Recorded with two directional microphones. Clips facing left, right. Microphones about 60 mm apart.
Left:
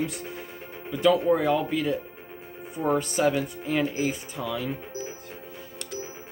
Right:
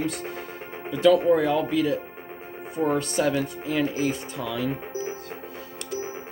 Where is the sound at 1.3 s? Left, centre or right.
Centre.